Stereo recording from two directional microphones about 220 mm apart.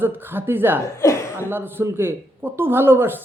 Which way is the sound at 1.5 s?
10° right (ahead or behind).